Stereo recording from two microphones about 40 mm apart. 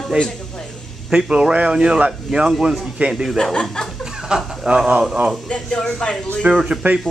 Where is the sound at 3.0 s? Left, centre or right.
Right.